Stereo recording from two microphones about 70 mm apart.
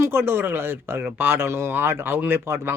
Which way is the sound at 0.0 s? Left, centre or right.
Right.